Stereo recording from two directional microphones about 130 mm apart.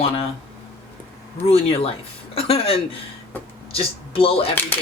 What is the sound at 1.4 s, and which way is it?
A woman's voice, 50° left (ahead or behind).